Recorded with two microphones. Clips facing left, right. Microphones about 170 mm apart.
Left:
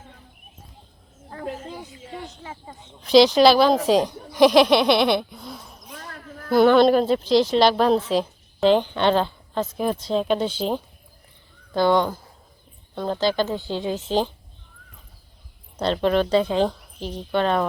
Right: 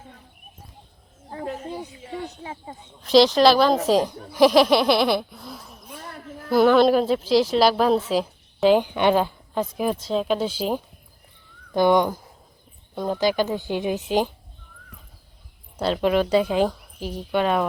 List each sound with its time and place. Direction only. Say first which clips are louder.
3.0 s speech: left 1 dB; centre (ahead or behind)
15.8 s speech: even; 5° right (ahead or behind)